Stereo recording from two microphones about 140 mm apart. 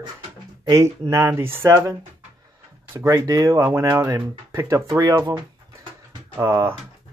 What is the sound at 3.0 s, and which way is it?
Speech, 25° right (ahead or behind).